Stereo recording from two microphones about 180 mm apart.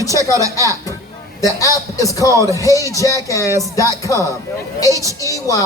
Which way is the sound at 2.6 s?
20° left (ahead or behind).